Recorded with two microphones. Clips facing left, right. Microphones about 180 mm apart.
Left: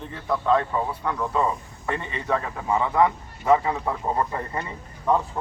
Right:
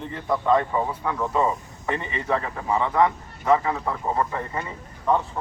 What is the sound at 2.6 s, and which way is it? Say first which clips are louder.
Speech: even; 5° left (ahead or behind).